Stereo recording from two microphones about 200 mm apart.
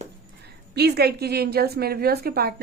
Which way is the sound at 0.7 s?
55° right (ahead or behind).